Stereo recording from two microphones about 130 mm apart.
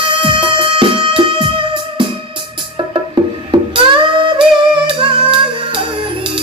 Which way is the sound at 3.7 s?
40° right (ahead or behind).